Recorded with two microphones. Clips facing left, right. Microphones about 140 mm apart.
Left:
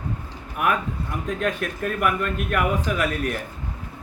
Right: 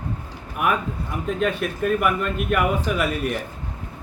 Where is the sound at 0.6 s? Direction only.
Centre (ahead or behind).